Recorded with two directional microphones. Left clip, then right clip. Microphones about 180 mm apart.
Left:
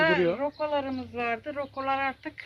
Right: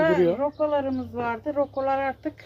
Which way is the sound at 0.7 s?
70° right (ahead or behind).